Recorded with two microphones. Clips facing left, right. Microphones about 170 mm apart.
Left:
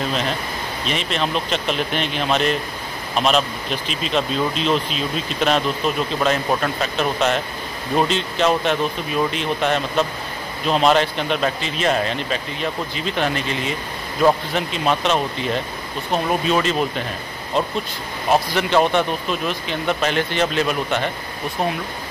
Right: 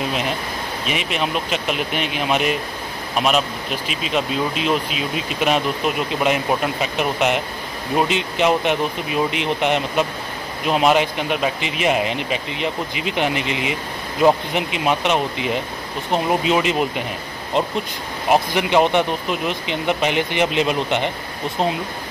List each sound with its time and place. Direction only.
0.8 s speech: 10° right (ahead or behind)
18.3 s speech: 15° right (ahead or behind)